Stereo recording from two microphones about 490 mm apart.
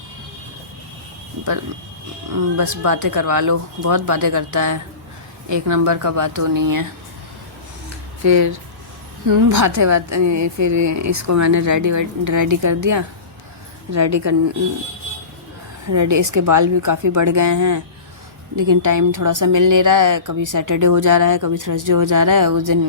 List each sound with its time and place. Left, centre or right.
2.3 s a woman's voice: right
8.2 s a woman's voice: right
15.9 s a woman's voice: right